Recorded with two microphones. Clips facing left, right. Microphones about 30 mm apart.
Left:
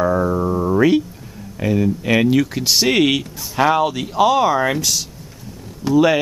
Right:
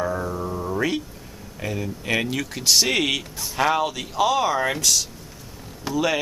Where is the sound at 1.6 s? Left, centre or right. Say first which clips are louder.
Left 11 dB; centre.